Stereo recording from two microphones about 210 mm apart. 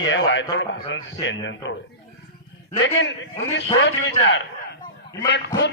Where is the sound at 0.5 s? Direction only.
60° left (ahead or behind).